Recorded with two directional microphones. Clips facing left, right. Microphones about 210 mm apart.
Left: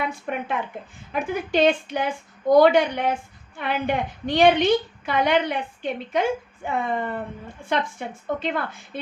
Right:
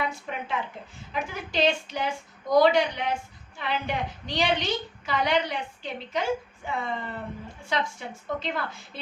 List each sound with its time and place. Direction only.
0.3 s a woman's voice: 55° left (ahead or behind)